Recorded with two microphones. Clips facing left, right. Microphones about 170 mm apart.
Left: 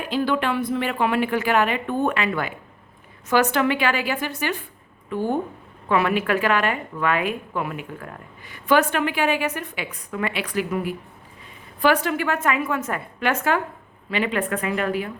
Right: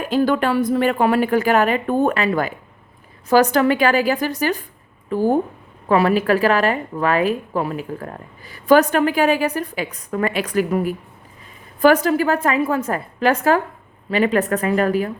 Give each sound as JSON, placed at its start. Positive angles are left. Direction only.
{"t": 0.0, "sound": "speech", "side_deg": -45}
{"t": 3.5, "sound": "speech", "side_deg": -40}